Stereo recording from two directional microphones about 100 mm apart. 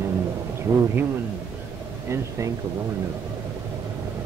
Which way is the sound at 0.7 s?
25° right (ahead or behind).